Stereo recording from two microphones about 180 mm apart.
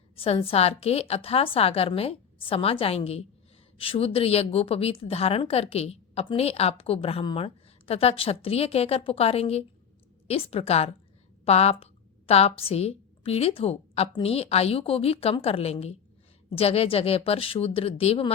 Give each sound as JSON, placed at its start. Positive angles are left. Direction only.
{"t": 0.2, "sound": "a woman's voice", "side_deg": 30}